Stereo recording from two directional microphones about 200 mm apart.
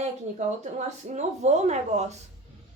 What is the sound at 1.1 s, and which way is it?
A woman's voice, 35° right (ahead or behind).